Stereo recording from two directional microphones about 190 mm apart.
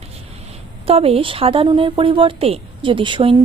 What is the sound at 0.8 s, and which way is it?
Speech, 30° right (ahead or behind).